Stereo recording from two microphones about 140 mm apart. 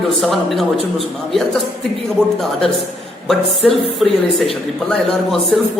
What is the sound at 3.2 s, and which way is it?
Speech, centre (ahead or behind).